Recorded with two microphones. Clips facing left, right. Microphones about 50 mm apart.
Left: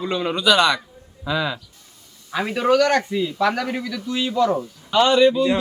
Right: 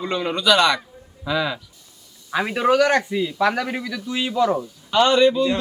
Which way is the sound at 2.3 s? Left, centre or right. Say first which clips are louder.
Even; centre.